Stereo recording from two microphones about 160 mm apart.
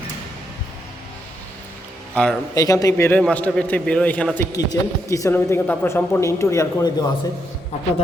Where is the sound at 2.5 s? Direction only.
20° left (ahead or behind).